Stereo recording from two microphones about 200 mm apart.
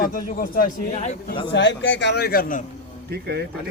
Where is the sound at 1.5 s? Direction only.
60° left (ahead or behind); by 2.6 s 45° left (ahead or behind).